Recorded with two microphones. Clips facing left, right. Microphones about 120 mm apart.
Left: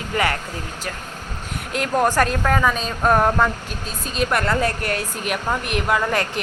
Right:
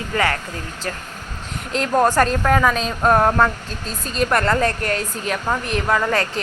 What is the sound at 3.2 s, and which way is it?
Speech, 10° right (ahead or behind).